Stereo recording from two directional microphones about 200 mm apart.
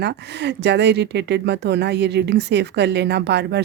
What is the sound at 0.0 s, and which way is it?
Speech, 60° right (ahead or behind).